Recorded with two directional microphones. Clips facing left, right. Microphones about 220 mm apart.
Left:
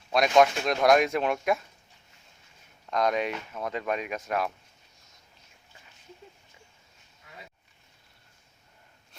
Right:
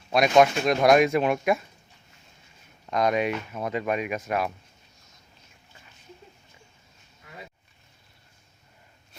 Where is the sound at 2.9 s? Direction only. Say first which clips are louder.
Right 3 dB; 5° right (ahead or behind).